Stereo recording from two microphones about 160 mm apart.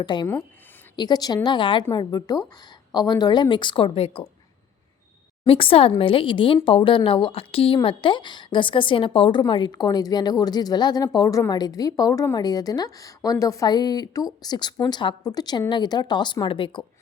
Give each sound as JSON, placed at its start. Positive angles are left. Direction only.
{"t": 0.0, "sound": "a woman's voice", "side_deg": 30}
{"t": 5.5, "sound": "a woman's voice", "side_deg": 35}